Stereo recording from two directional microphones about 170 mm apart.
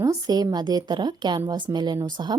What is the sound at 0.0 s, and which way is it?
Speech, 25° right (ahead or behind).